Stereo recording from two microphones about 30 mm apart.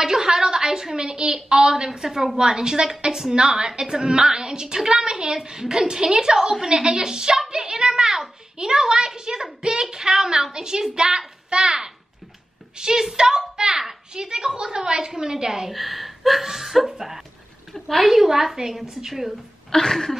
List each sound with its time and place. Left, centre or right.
0.0 s a woman's voice: centre
15.7 s a woman's voice: centre
17.7 s a woman's voice: centre
18.0 s a woman's voice: centre
19.7 s a sound: centre